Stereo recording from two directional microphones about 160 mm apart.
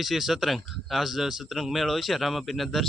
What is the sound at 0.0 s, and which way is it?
Speech, centre (ahead or behind).